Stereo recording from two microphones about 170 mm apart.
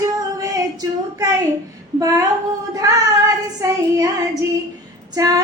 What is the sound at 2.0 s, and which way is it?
Speech, 20° right (ahead or behind).